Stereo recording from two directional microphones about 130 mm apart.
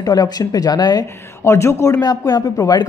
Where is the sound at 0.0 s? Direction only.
30° left (ahead or behind).